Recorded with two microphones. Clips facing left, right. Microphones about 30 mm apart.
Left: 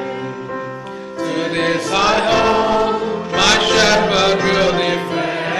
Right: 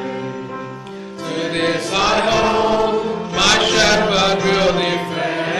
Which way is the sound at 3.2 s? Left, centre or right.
Centre.